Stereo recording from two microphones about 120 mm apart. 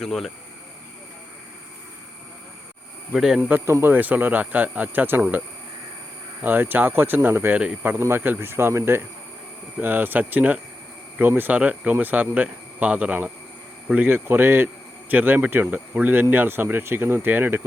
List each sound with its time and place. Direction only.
0.0 s speech: 5° left (ahead or behind)
3.1 s speech: 5° right (ahead or behind)
3.5 s speech: 20° right (ahead or behind)
6.4 s speech: 15° right (ahead or behind)